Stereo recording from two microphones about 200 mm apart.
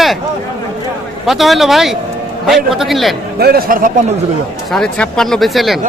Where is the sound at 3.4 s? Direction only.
50° right (ahead or behind).